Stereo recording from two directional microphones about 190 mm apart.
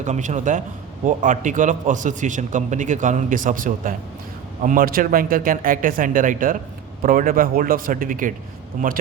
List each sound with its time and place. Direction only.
0.0 s a man's voice: 40° right (ahead or behind)